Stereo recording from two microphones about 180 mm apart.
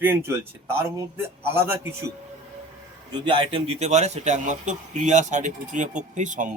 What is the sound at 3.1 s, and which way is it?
A man's voice, 25° right (ahead or behind).